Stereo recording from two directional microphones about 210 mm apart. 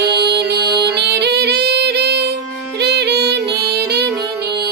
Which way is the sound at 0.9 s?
50° right (ahead or behind).